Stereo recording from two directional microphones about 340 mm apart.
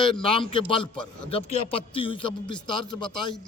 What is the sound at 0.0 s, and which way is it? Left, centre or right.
A man's voice, centre.